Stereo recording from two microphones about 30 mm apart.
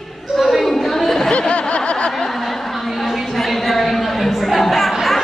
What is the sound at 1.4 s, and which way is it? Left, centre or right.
Snicker, left.